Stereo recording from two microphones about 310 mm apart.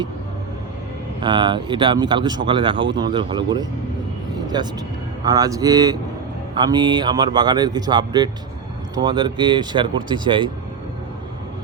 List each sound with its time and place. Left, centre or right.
1.2 s speech: centre
4.4 s a sound: centre
5.2 s speech: centre